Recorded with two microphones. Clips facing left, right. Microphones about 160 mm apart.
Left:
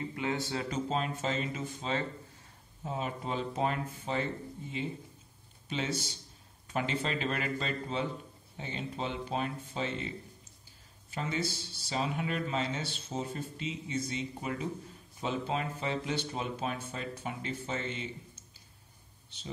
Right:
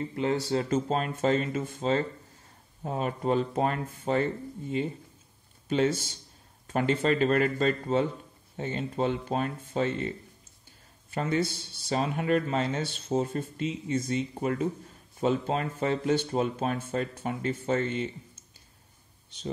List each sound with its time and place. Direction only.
0.1 s speech: 35° right (ahead or behind)
2.8 s speech: 55° right (ahead or behind)